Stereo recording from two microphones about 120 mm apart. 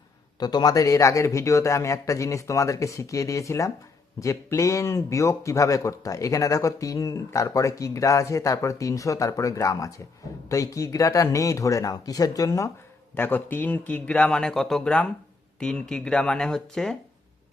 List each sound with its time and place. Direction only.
0.3 s speech: 35° left (ahead or behind)
13.1 s a man's voice: 15° left (ahead or behind)